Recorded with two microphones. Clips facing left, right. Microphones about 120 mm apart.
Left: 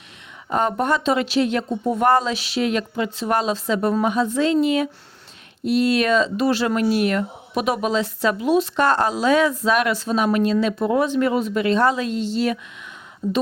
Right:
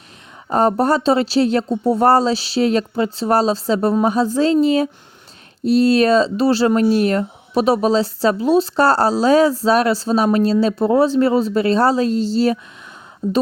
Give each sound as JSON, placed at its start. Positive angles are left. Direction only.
{"t": 0.5, "sound": "speech", "side_deg": -35}